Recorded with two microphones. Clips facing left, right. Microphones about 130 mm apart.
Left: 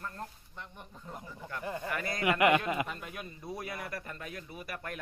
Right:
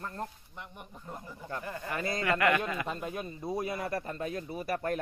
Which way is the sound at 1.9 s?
25° right (ahead or behind).